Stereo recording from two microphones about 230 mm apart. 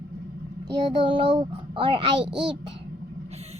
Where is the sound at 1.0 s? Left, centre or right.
Right.